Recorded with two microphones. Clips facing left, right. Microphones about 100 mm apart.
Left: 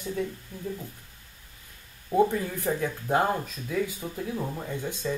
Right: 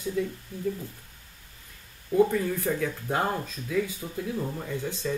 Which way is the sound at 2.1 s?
20° left (ahead or behind).